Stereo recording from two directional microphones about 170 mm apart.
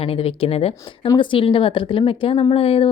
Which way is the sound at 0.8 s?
25° left (ahead or behind).